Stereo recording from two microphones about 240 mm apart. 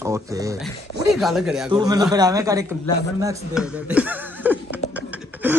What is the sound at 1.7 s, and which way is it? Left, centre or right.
Speech, centre.